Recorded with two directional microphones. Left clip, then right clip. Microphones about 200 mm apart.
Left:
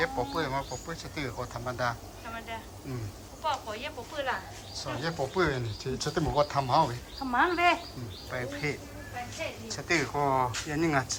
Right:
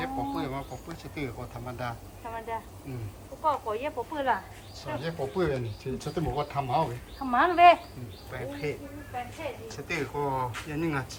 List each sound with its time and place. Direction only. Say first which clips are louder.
0.0 s speech: left 2 dB; centre (ahead or behind)
3.4 s speech: right 4 dB; 25° right (ahead or behind)
4.8 s speech: left 1 dB; centre (ahead or behind)
7.3 s speech: right 6 dB; 35° right (ahead or behind)
8.6 s speech: even; centre (ahead or behind)